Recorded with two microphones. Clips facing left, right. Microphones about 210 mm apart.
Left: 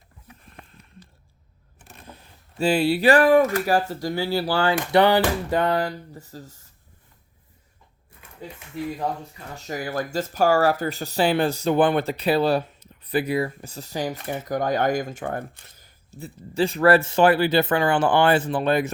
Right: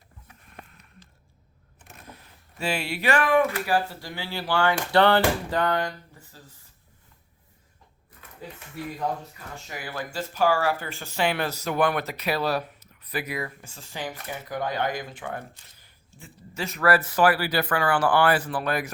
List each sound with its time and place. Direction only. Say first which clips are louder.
1.8 s speech: left 2 dB; 30° left (ahead or behind)
4.7 s speech: left 2 dB; 20° left (ahead or behind); by 6.4 s 35° left (ahead or behind)
9.6 s speech: left 8 dB; 40° left (ahead or behind); by 18.9 s 25° left (ahead or behind)